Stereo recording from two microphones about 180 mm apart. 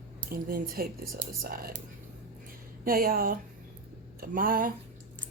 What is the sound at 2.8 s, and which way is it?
Speech, 55° right (ahead or behind).